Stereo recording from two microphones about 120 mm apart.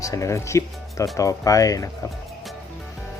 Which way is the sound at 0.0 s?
25° left (ahead or behind).